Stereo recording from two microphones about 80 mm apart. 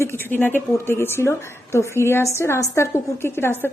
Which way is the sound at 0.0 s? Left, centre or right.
Left.